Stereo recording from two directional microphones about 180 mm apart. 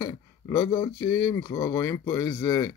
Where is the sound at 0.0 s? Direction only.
20° left (ahead or behind).